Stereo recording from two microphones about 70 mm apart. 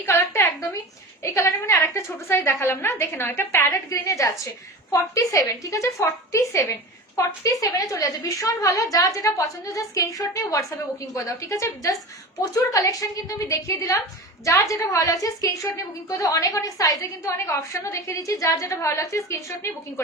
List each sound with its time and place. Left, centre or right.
0.0 s a sound: left
1.2 s a woman's voice: left
3.8 s a woman's voice: left
7.2 s a woman's voice: left